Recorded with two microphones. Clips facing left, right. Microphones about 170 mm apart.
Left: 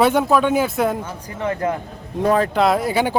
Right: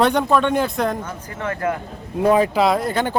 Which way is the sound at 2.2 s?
10° right (ahead or behind).